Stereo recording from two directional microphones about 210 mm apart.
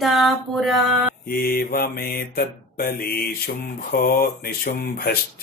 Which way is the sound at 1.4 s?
45° left (ahead or behind).